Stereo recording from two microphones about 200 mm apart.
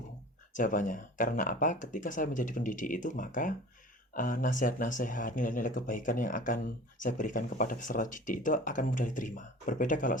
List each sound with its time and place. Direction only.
0.5 s speech: 40° left (ahead or behind)